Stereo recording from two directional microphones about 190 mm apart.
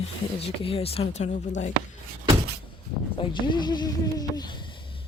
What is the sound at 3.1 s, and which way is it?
Speech, 25° left (ahead or behind).